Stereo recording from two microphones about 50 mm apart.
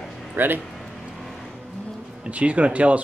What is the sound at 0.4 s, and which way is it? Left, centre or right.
Speech, right.